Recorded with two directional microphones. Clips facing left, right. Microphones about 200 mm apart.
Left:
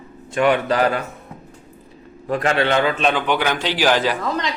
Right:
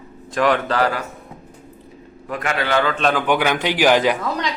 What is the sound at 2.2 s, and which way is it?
Speech, 30° left (ahead or behind).